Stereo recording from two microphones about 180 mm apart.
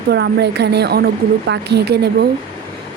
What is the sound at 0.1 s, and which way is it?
A woman's voice, 70° right (ahead or behind).